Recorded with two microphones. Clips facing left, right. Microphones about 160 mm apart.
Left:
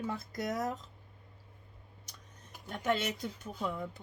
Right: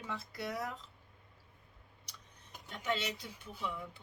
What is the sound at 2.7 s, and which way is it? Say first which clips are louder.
Speech: left 5 dB; 45° left (ahead or behind).